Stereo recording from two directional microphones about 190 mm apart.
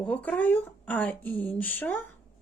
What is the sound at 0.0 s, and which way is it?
Speech, 5° left (ahead or behind).